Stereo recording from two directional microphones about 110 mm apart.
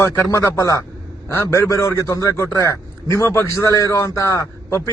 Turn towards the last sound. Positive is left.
turn(degrees=25)  # may be behind; listen again after turning